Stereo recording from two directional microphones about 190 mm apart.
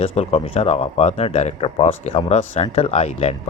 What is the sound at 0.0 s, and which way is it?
Speech, 30° left (ahead or behind).